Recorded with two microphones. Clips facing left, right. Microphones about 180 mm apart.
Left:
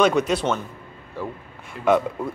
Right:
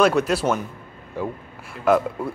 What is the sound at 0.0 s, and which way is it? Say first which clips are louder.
Speech: right 1 dB; 5° right (ahead or behind).